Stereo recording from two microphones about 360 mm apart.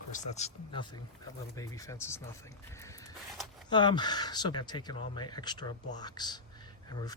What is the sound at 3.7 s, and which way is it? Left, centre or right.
Speech, centre.